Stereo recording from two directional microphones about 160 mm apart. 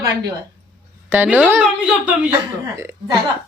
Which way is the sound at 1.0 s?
10° right (ahead or behind).